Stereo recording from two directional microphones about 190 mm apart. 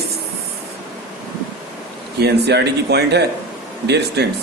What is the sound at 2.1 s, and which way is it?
A man's voice, 60° right (ahead or behind).